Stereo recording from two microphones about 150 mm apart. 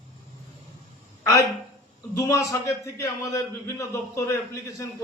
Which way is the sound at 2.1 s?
20° left (ahead or behind).